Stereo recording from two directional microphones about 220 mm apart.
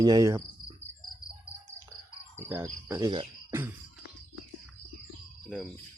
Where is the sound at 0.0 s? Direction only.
15° right (ahead or behind).